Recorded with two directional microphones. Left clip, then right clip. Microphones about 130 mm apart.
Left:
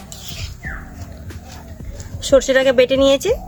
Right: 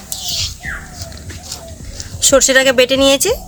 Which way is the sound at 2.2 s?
10° left (ahead or behind).